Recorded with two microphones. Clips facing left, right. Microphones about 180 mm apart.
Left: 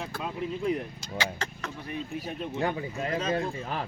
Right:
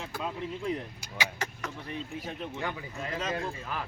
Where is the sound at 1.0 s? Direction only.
15° right (ahead or behind).